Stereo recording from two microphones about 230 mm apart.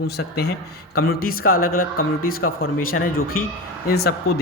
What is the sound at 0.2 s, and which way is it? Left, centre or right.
A man's voice, left.